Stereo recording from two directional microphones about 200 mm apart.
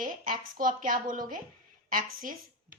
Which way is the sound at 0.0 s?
40° right (ahead or behind).